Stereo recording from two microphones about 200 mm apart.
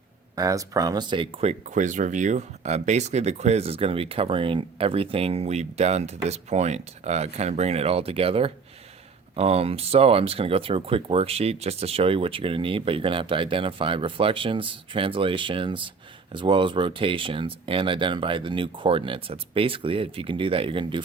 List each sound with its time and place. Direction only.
0.3 s speech: 15° right (ahead or behind)